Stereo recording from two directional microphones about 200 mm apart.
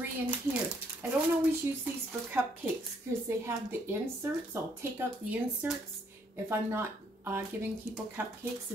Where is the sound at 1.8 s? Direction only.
5° right (ahead or behind).